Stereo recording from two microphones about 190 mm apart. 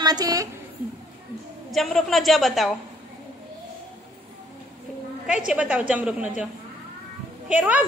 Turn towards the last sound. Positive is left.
turn(degrees=-10)  # may be behind; listen again after turning